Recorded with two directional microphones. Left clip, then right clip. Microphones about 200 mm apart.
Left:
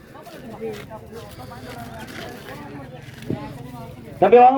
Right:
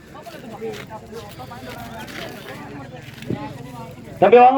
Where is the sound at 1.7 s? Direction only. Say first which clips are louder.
Right 1 dB; 45° right (ahead or behind).